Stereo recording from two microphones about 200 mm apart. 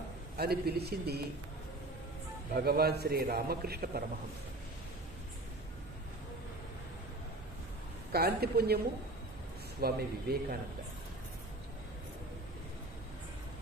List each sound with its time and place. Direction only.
0.4 s a man's voice: 50° right (ahead or behind)
2.5 s a man's voice: 50° right (ahead or behind)
8.1 s a man's voice: 50° right (ahead or behind)
9.8 s a man's voice: 50° right (ahead or behind)